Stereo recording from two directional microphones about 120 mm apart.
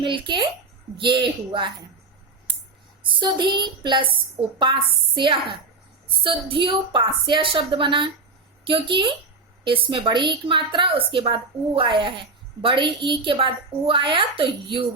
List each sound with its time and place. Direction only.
0.0 s a woman's voice: 40° right (ahead or behind)
3.1 s a woman's voice: 40° right (ahead or behind)